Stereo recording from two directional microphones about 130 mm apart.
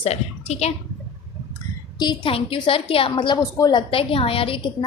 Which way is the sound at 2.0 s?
35° left (ahead or behind).